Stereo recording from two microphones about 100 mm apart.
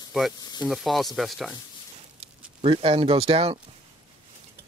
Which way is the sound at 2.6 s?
75° right (ahead or behind).